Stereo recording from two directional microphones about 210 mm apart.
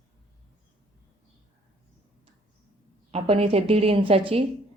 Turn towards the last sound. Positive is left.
turn(degrees=-25)  # may be behind; listen again after turning